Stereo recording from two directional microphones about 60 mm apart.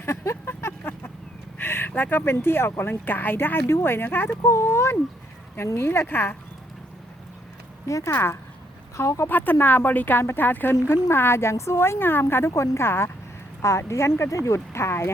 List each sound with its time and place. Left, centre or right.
0.0 s vehicle: left
1.5 s a sound: left
2.0 s speech: left
4.4 s speech: left
7.9 s speech: left
8.1 s speech: left
9.0 s speech: left
9.2 s speech: left
11.1 s speech: left
12.5 s speech: left
13.6 s speech: left